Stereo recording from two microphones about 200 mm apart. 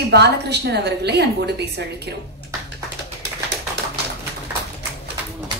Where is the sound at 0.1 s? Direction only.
55° right (ahead or behind).